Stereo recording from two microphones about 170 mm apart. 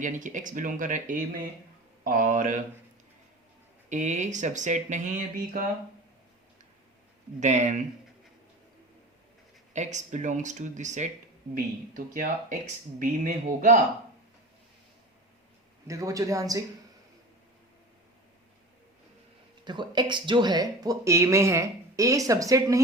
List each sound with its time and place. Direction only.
0.0 s speech: 50° right (ahead or behind)
3.8 s speech: 45° right (ahead or behind)
7.3 s speech: 45° right (ahead or behind)
9.7 s speech: 45° right (ahead or behind)
15.9 s speech: 20° right (ahead or behind)
19.6 s speech: 25° right (ahead or behind)